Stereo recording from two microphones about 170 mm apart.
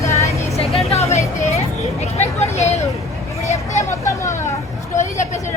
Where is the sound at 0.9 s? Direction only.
40° left (ahead or behind).